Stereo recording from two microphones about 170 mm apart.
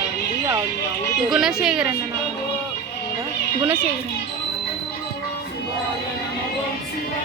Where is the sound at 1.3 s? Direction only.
5° right (ahead or behind).